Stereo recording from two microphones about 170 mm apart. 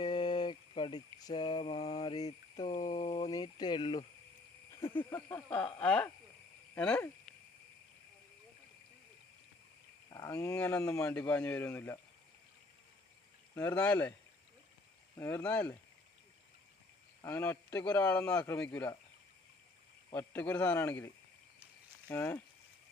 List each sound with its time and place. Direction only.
0.0 s mantra: 25° left (ahead or behind)
2.7 s speech: 45° left (ahead or behind)
3.1 s speech: 25° left (ahead or behind)
5.1 s speech: 10° left (ahead or behind)
10.1 s speech: 20° left (ahead or behind)
13.7 s speech: 10° left (ahead or behind)
15.2 s speech: 10° left (ahead or behind)
17.2 s speech: 10° left (ahead or behind)
20.1 s speech: 10° left (ahead or behind)
22.1 s speech: 10° left (ahead or behind)